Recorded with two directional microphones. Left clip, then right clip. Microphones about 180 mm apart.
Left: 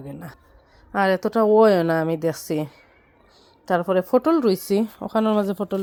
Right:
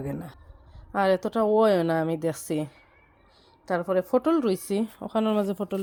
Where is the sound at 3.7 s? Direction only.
20° left (ahead or behind).